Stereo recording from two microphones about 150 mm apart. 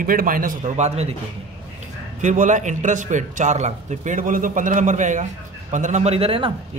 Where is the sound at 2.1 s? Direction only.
55° right (ahead or behind); by 6.5 s 35° right (ahead or behind).